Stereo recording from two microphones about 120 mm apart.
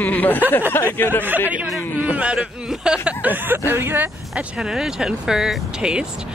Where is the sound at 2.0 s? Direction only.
10° right (ahead or behind).